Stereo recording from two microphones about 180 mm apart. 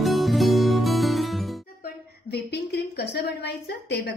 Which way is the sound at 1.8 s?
65° left (ahead or behind).